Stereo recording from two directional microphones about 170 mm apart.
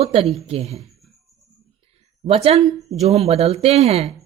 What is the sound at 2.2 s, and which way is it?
Speech, 35° right (ahead or behind).